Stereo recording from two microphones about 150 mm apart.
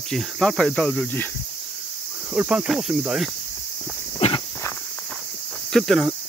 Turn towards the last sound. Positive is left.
turn(degrees=0)  # may be behind; listen again after turning